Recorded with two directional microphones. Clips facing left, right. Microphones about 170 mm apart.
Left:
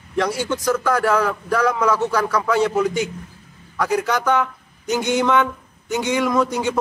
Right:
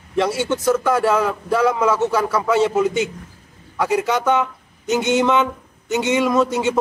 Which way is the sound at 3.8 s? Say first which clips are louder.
Right 2 dB; 5° right (ahead or behind).